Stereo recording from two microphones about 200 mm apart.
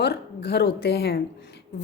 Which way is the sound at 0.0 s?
55° left (ahead or behind).